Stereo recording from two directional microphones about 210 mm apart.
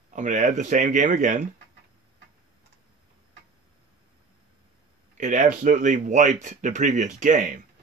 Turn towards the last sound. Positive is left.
turn(degrees=-40)  # may be behind; listen again after turning